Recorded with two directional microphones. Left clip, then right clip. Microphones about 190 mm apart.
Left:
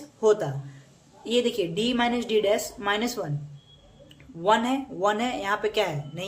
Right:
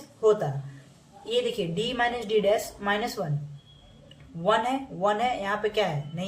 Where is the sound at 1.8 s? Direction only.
35° left (ahead or behind).